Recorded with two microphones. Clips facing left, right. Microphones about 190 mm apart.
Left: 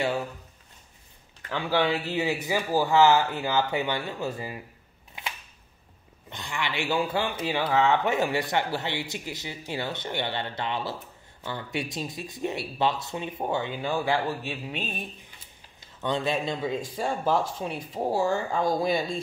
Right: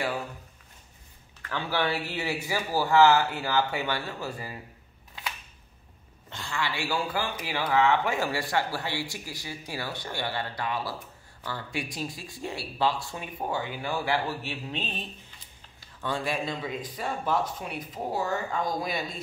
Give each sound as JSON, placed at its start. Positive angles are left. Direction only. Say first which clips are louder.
{"t": 1.4, "sound": "a man's voice", "louder": "left 4 dB", "side_deg": 15}
{"t": 6.3, "sound": "speech", "louder": "left 1 dB", "side_deg": 20}